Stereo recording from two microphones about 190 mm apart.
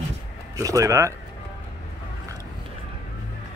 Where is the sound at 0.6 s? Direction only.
15° right (ahead or behind).